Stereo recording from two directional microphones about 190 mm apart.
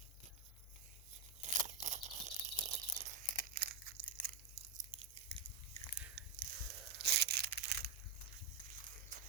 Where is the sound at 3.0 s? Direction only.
50° right (ahead or behind).